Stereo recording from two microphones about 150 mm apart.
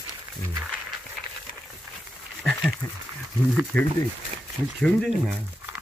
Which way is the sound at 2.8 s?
15° left (ahead or behind).